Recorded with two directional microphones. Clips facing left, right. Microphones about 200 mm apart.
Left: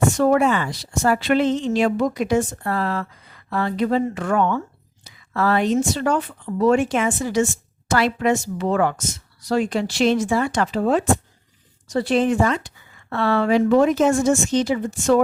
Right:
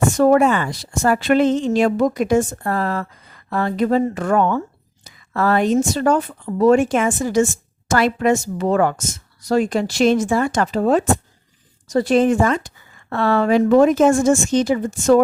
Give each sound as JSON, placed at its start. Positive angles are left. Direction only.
{"t": 0.2, "sound": "a woman's voice", "side_deg": -45}